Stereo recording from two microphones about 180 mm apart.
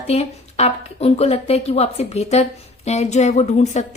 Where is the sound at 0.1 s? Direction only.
35° left (ahead or behind).